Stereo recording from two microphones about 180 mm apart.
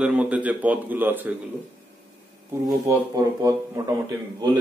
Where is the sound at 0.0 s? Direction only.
5° right (ahead or behind).